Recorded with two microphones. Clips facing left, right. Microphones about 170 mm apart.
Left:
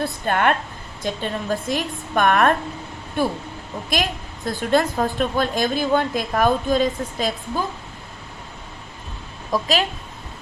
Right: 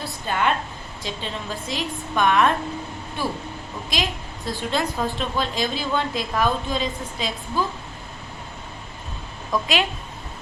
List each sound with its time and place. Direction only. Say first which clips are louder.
0.0 s a woman's voice: left 4 dB; 55° left (ahead or behind)
9.5 s a woman's voice: left 2 dB; 40° left (ahead or behind)